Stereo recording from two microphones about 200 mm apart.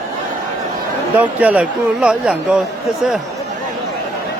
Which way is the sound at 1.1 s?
5° right (ahead or behind).